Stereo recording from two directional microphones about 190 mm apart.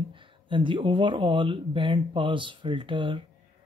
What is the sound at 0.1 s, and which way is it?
Speech, 25° right (ahead or behind).